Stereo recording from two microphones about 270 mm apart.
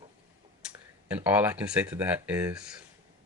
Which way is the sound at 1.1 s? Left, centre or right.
Centre.